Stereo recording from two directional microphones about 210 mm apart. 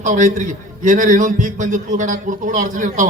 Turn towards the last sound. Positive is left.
turn(degrees=-35)  # may be behind; listen again after turning